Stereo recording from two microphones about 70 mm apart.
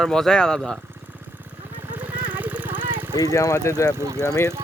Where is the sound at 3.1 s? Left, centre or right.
Left.